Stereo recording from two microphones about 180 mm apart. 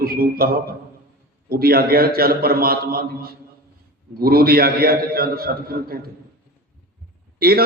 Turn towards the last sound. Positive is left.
turn(degrees=-55)  # may be behind; listen again after turning